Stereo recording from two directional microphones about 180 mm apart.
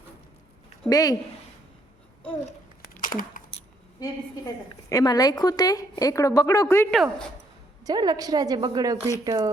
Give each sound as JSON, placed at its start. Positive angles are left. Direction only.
{"t": 0.9, "sound": "a woman's voice", "side_deg": 20}
{"t": 3.0, "sound": "a sound", "side_deg": 50}
{"t": 4.0, "sound": "a woman's voice", "side_deg": 20}
{"t": 6.9, "sound": "speech", "side_deg": 0}
{"t": 7.9, "sound": "a woman's voice", "side_deg": -20}